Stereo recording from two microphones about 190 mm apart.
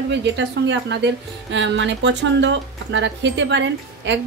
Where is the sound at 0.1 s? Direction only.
65° right (ahead or behind).